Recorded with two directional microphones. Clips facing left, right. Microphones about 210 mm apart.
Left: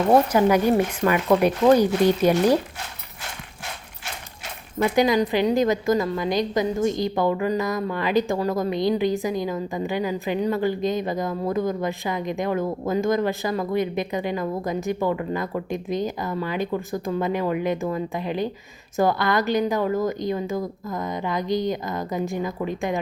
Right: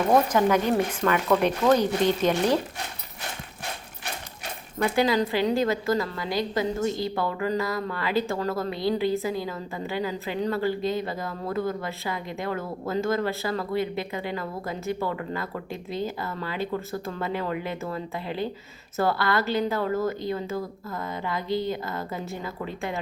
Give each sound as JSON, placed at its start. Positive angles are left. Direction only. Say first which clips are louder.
{"t": 0.3, "sound": "a woman's voice", "louder": "left 4 dB", "side_deg": 10}
{"t": 4.8, "sound": "a woman's voice", "louder": "left 3 dB", "side_deg": 15}